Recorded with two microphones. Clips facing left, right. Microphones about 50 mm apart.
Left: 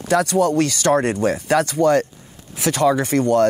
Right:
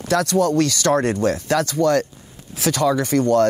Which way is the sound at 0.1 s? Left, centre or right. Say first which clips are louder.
Left 1 dB; centre.